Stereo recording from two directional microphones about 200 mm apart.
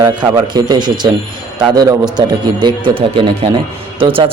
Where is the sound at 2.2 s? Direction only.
20° right (ahead or behind).